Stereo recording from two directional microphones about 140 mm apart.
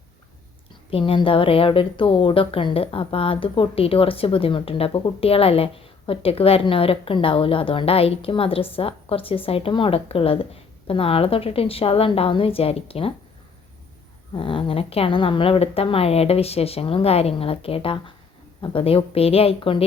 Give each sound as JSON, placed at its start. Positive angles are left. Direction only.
{"t": 0.9, "sound": "a woman's voice", "side_deg": 40}
{"t": 14.3, "sound": "speech", "side_deg": 40}